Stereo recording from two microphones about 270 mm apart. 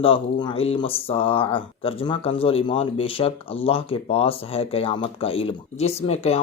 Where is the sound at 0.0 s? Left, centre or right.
Centre.